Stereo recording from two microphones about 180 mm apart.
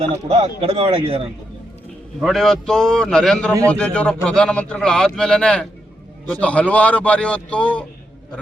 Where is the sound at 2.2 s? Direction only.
Centre (ahead or behind).